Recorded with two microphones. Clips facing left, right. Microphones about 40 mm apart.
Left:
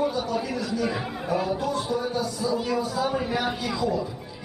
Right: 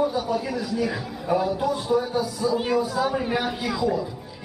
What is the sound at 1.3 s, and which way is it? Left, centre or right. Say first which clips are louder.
Speech: right 4 dB; centre.